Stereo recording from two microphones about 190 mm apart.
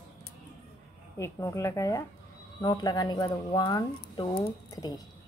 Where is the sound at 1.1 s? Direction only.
15° left (ahead or behind).